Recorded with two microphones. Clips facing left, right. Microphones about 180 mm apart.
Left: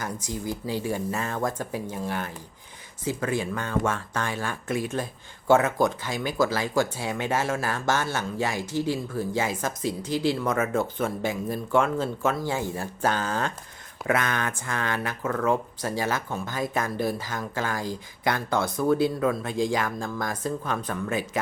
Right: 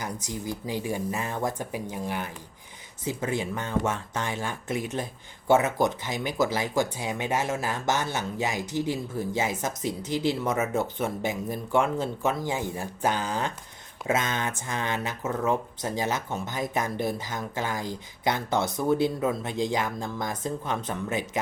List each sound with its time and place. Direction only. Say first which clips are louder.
0.0 s speech: left 2 dB; 20° right (ahead or behind)